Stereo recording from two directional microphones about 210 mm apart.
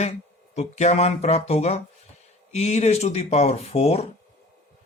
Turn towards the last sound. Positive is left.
turn(degrees=30)  # may be behind; listen again after turning